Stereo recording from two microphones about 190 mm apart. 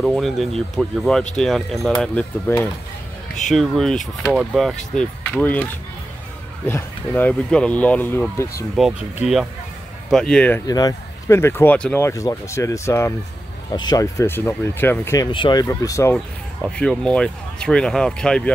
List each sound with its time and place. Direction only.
0.0 s speech: centre (ahead or behind)
8.7 s speech: centre (ahead or behind)
10.7 s speech: 20° left (ahead or behind)
15.3 s speech: 25° left (ahead or behind)
16.6 s speech: 5° left (ahead or behind)